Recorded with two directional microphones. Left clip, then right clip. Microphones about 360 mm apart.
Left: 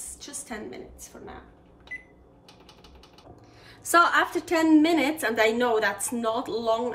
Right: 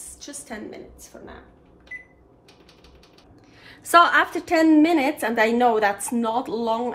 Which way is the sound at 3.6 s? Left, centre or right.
Centre.